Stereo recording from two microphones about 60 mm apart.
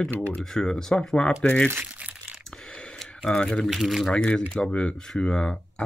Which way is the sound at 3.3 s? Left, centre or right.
Centre.